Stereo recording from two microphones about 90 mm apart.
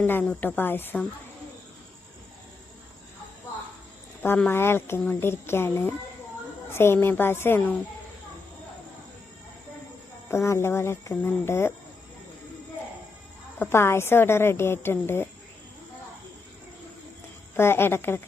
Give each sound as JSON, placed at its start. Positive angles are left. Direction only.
{"t": 0.0, "sound": "a woman's voice", "side_deg": 20}
{"t": 4.4, "sound": "a woman's voice", "side_deg": 25}
{"t": 10.2, "sound": "a woman's voice", "side_deg": 30}
{"t": 13.6, "sound": "a woman's voice", "side_deg": 25}
{"t": 17.6, "sound": "a woman's voice", "side_deg": 25}